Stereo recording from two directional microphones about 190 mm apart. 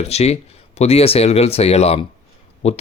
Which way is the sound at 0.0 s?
35° left (ahead or behind).